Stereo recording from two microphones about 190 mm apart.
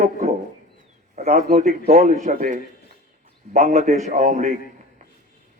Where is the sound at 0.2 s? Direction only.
40° right (ahead or behind).